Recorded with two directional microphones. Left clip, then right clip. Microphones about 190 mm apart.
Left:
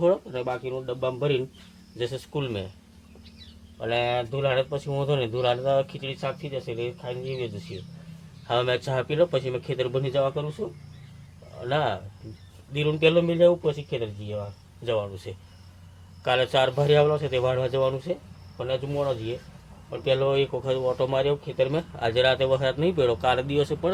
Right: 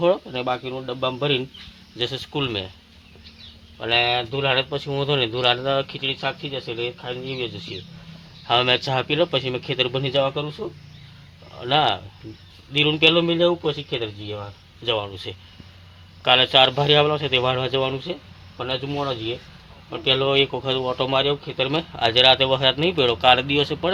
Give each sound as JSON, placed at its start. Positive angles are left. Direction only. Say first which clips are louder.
{"t": 0.0, "sound": "a man's voice", "louder": "right 3 dB", "side_deg": -20}
{"t": 3.8, "sound": "a man's voice", "louder": "right 5 dB", "side_deg": -15}
{"t": 11.6, "sound": "a man's voice", "louder": "right 6 dB", "side_deg": -20}